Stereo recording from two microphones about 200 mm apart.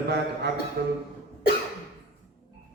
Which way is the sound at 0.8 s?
55° right (ahead or behind).